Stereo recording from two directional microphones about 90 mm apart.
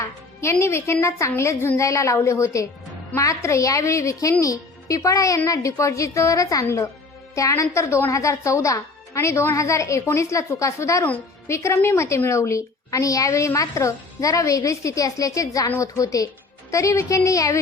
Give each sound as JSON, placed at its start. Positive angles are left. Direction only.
{"t": 0.6, "sound": "a woman's voice", "side_deg": 30}